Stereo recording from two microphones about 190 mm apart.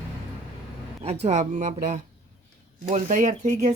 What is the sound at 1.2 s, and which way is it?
Speech, 40° right (ahead or behind).